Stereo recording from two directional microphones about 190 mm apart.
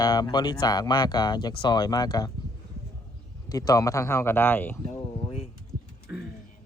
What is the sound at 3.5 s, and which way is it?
Speech, 20° left (ahead or behind).